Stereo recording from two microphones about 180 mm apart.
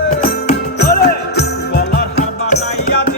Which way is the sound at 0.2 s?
55° left (ahead or behind).